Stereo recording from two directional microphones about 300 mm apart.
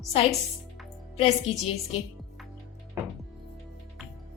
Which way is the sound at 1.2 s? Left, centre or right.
Centre.